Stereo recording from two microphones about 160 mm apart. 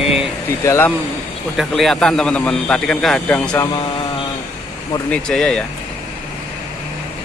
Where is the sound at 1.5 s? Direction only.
Centre (ahead or behind).